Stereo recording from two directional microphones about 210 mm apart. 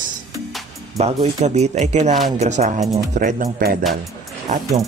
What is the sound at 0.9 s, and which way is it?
Speech, 30° right (ahead or behind).